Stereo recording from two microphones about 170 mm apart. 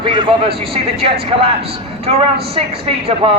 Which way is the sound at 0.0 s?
30° right (ahead or behind).